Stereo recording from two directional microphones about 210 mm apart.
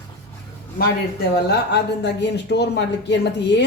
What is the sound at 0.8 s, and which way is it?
Speech, 50° left (ahead or behind).